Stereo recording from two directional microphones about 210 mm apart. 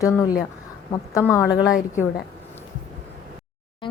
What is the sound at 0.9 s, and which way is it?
Speech, 15° left (ahead or behind).